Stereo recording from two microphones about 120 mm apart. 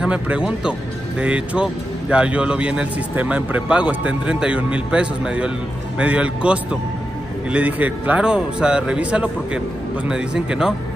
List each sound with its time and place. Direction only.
0.0 s speech: 10° right (ahead or behind)